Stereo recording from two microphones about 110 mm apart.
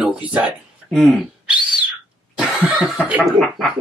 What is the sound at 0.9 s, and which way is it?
Speech, centre (ahead or behind).